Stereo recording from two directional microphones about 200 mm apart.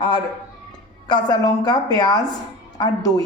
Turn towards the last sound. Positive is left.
turn(degrees=20)  # may be behind; listen again after turning